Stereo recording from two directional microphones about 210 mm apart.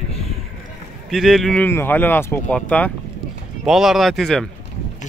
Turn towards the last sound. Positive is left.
turn(degrees=0)  # may be behind; listen again after turning